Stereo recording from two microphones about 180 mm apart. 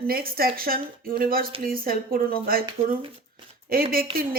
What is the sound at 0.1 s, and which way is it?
A woman's voice, 55° right (ahead or behind).